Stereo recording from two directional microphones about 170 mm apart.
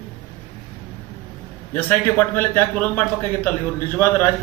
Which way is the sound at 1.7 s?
10° left (ahead or behind).